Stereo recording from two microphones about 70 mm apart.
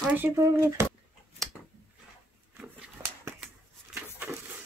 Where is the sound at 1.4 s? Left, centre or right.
Centre.